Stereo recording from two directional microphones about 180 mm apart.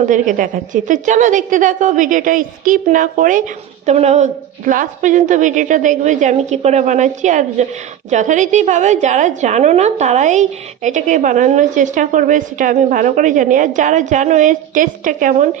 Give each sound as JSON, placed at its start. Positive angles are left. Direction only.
{"t": 0.0, "sound": "a woman's voice", "side_deg": -45}